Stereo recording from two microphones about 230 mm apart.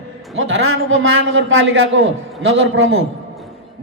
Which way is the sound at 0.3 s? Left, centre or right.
Right.